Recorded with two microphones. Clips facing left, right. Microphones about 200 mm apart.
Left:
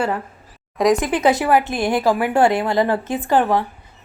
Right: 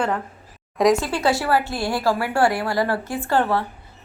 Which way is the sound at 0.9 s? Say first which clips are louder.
Left 4 dB; 20° left (ahead or behind).